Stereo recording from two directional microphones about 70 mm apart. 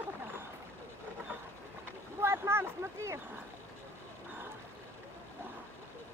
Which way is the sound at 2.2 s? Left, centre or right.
Right.